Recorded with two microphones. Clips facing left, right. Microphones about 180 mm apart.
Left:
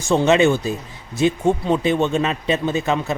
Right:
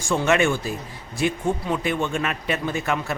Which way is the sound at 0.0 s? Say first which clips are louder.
Left 5 dB; 25° left (ahead or behind).